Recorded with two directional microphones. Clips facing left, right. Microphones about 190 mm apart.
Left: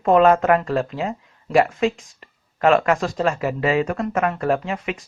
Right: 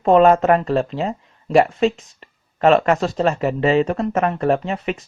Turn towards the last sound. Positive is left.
turn(degrees=-35)  # may be behind; listen again after turning